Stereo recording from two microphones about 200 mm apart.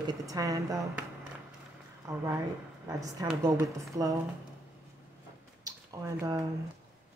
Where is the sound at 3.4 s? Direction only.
15° right (ahead or behind).